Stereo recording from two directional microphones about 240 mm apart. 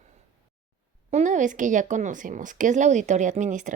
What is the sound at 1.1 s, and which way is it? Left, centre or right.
Speech, right.